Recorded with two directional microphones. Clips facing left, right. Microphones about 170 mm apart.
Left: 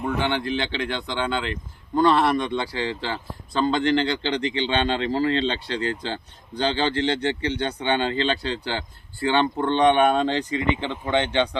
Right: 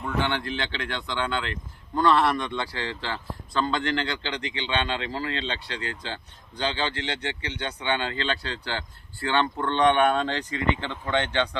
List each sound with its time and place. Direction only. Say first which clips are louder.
0.0 s a man's voice: left 3 dB; 15° left (ahead or behind)